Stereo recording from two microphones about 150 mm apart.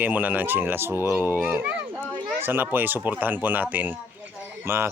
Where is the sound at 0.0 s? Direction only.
10° right (ahead or behind).